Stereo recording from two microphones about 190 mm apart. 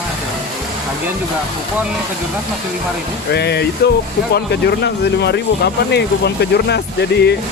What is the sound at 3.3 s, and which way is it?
Speech, 60° left (ahead or behind).